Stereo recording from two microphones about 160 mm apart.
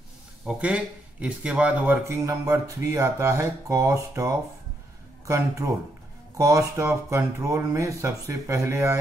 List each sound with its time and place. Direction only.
0.5 s speech: 10° right (ahead or behind)